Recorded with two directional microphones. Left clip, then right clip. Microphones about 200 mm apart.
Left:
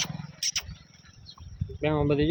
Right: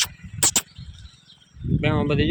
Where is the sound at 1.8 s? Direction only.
5° left (ahead or behind).